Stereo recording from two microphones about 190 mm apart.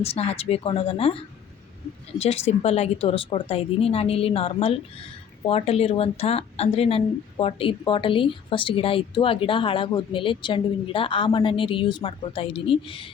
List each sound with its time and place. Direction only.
0.0 s speech: 30° left (ahead or behind)